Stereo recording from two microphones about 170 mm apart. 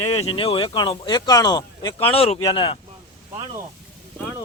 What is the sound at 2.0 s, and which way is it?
Speech, 35° left (ahead or behind).